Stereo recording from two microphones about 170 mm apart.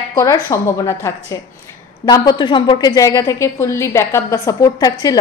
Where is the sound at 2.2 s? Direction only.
25° left (ahead or behind).